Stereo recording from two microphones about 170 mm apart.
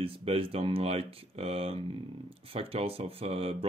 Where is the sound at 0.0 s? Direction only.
35° right (ahead or behind).